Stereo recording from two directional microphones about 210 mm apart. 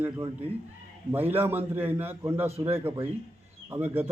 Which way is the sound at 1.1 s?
10° right (ahead or behind).